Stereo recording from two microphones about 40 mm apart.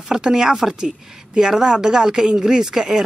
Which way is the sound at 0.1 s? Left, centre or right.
Centre.